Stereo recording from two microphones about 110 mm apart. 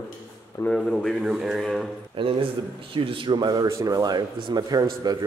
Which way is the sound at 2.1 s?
55° right (ahead or behind).